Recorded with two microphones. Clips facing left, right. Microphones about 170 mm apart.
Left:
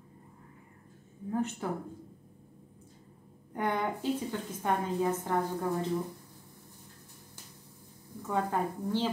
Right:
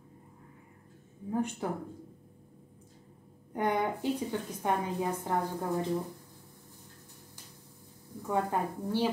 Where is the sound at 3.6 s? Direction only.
15° right (ahead or behind).